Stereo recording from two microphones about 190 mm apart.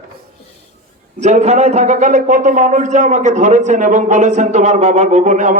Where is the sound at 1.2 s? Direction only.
35° right (ahead or behind).